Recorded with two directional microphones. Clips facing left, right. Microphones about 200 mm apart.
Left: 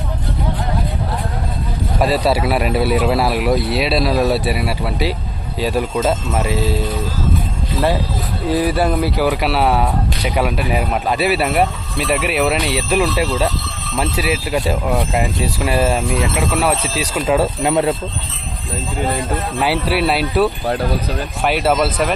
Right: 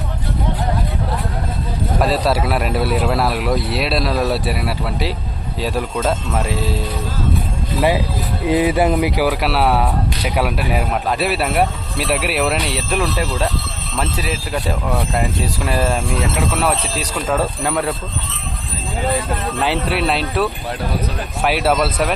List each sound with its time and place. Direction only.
2.0 s speech: centre (ahead or behind)
8.4 s speech: 20° right (ahead or behind); by 17.4 s 5° left (ahead or behind)
17.6 s speech: 20° left (ahead or behind)
19.6 s speech: 5° left (ahead or behind)